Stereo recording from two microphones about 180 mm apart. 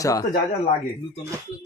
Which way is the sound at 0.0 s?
20° left (ahead or behind).